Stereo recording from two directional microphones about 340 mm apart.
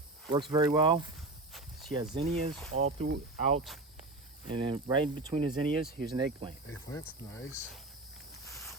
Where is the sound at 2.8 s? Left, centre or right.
Centre.